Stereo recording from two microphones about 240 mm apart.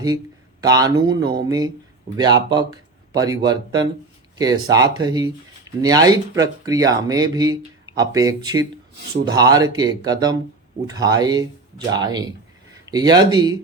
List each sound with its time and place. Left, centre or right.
0.6 s speech: centre